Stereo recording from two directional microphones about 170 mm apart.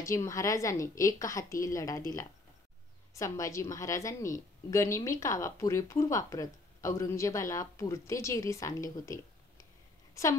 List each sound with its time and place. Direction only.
0.0 s a woman's voice: 15° left (ahead or behind)
3.2 s a woman's voice: 20° left (ahead or behind)